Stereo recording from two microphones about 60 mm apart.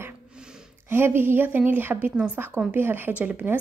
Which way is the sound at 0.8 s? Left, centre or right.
Right.